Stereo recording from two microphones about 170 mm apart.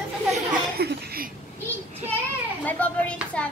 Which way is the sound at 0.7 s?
65° right (ahead or behind).